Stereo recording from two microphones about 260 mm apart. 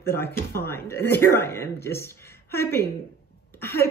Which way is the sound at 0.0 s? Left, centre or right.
Centre.